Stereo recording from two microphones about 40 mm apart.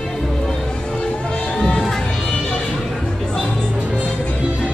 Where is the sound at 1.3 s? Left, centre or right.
Left.